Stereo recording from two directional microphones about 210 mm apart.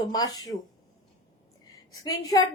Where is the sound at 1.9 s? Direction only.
15° left (ahead or behind).